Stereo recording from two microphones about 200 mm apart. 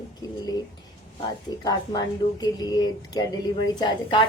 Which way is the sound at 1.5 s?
20° left (ahead or behind).